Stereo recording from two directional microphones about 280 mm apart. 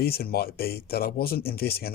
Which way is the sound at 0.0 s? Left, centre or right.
Left.